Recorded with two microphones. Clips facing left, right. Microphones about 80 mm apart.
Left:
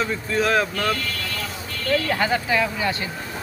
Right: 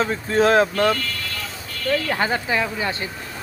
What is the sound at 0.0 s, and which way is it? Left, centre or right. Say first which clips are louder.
Speech: right 4 dB; right.